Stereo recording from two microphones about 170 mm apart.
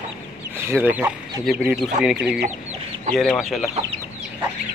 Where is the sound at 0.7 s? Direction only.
10° right (ahead or behind).